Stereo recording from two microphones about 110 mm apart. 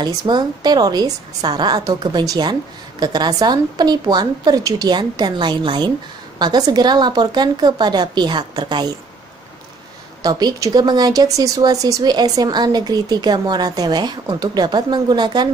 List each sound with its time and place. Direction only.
0.0 s speech: 40° right (ahead or behind)
10.2 s speech: 35° right (ahead or behind)